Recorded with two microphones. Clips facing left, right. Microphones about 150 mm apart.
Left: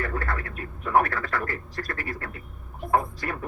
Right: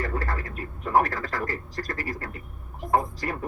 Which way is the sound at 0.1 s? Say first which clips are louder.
Even; 35° right (ahead or behind).